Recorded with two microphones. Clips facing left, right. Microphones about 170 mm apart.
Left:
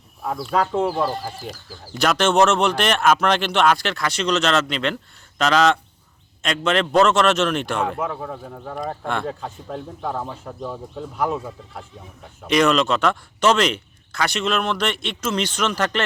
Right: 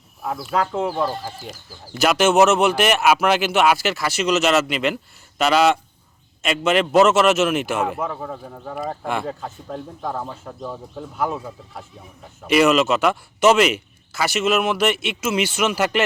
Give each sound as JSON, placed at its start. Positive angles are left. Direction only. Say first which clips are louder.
{"t": 0.2, "sound": "a man's voice", "louder": "left 1 dB", "side_deg": -5}